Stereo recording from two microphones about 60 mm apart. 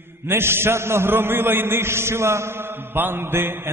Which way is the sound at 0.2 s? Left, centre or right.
Right.